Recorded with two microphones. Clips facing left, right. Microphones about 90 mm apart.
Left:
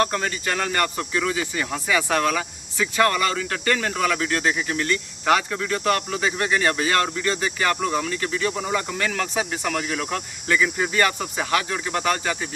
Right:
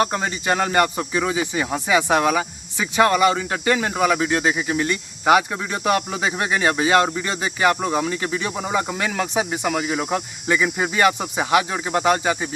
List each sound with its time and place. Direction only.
0.0 s speech: 20° right (ahead or behind)